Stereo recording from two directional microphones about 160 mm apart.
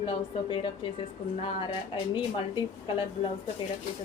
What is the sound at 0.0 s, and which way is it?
Speech, 30° left (ahead or behind).